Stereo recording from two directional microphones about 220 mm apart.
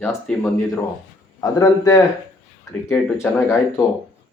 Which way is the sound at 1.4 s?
15° left (ahead or behind).